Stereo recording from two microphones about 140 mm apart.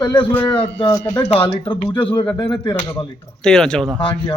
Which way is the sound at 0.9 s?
25° left (ahead or behind).